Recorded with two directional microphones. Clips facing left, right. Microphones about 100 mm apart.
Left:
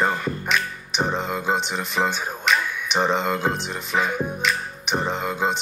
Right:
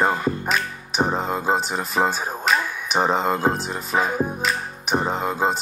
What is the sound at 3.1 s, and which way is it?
Speech, 35° right (ahead or behind).